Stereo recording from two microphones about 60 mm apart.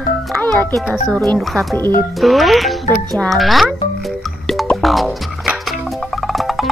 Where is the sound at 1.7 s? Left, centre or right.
Left.